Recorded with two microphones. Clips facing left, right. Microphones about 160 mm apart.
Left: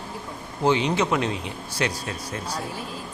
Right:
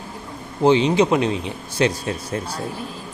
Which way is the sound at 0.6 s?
25° right (ahead or behind).